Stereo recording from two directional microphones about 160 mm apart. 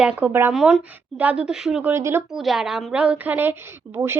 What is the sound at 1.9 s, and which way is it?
Speech, 15° right (ahead or behind).